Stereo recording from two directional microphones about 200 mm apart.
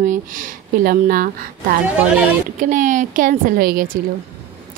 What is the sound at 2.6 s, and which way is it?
Speech, 40° right (ahead or behind).